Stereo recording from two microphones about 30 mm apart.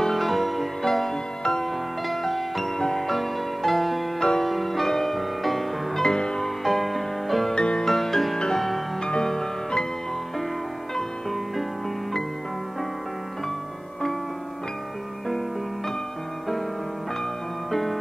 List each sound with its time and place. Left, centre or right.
0.0 s music: centre
0.8 s music: centre
6.0 s music: left
6.4 s music: centre
7.5 s music: left
7.8 s music: centre
9.2 s music: centre
11.0 s music: centre
17.6 s music: centre